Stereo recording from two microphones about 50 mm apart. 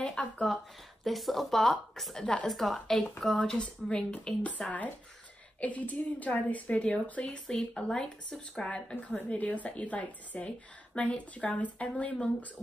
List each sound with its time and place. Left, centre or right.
0.2 s speech: centre
1.0 s a woman's voice: centre
3.4 s a woman's voice: left
7.4 s speech: centre; by 12.4 s left